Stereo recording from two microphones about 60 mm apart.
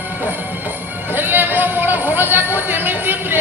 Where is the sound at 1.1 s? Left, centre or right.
Right.